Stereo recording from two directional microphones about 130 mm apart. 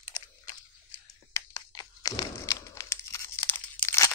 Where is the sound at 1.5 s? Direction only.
25° left (ahead or behind).